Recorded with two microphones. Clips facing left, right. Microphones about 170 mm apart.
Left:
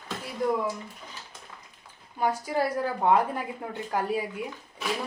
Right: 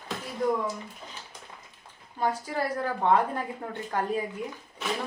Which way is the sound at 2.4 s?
10° left (ahead or behind).